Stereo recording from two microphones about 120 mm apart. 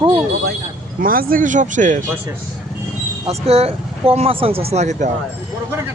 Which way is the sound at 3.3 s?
60° right (ahead or behind).